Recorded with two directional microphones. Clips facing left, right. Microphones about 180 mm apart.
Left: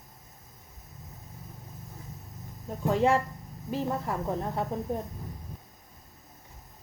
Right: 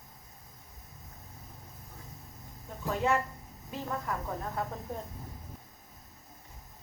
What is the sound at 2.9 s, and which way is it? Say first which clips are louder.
Dishes: left 5 dB; 30° left (ahead or behind).